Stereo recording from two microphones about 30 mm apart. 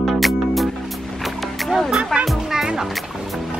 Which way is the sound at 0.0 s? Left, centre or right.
Centre.